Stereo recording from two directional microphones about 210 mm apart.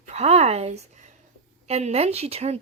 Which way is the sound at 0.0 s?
30° right (ahead or behind).